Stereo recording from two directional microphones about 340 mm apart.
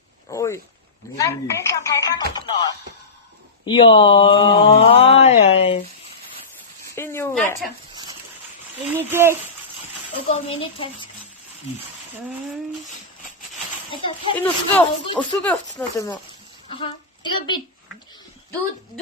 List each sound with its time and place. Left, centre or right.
0.3 s speech: centre
3.7 s speech: centre
6.9 s a sound: centre
9.0 s speech: centre
10.3 s speech: centre
13.9 s speech: centre